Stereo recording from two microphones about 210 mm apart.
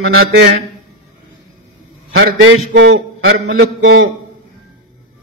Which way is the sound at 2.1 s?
60° right (ahead or behind).